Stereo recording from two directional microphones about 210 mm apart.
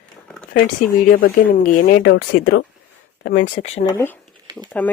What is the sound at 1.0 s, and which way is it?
Speech, 45° left (ahead or behind).